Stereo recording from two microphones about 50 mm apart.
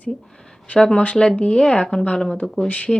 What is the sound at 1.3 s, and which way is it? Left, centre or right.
Speech, centre.